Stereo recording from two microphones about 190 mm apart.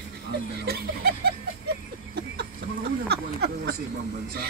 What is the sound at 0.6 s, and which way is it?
Speech, 55° right (ahead or behind).